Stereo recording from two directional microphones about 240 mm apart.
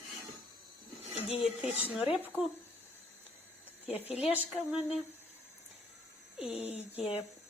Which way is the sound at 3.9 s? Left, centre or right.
Left.